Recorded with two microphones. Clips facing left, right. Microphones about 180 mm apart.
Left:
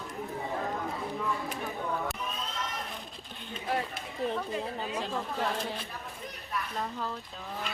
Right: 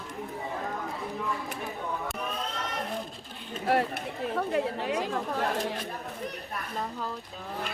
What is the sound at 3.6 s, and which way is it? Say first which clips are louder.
Run: right 7 dB; 65° right (ahead or behind).